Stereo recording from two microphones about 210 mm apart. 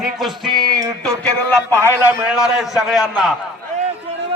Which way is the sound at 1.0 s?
5° left (ahead or behind).